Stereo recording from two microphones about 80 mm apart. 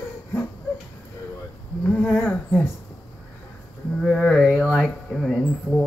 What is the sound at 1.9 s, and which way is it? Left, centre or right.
Speech, left.